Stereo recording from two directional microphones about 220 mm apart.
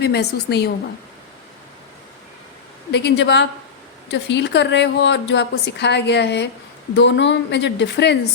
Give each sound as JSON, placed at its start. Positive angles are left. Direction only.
{"t": 0.0, "sound": "a woman's voice", "side_deg": 50}
{"t": 2.9, "sound": "a woman's voice", "side_deg": 50}